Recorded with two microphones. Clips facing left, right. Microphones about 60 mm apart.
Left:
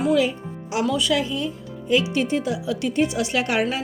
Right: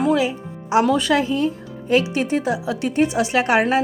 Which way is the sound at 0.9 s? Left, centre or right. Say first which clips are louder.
Right 4 dB; right.